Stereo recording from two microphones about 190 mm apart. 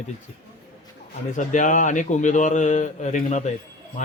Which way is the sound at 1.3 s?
40° left (ahead or behind).